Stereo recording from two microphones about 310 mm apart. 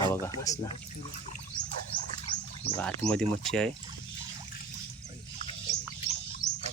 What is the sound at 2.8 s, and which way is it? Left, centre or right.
Speech, centre.